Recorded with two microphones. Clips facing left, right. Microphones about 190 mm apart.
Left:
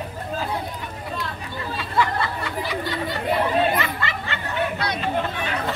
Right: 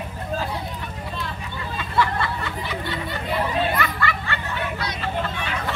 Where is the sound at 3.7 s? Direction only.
20° left (ahead or behind).